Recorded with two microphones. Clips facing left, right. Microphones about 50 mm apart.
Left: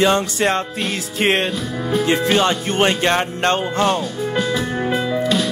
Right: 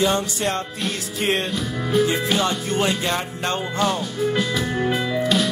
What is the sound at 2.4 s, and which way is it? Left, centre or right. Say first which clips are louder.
Music: left 5 dB; left.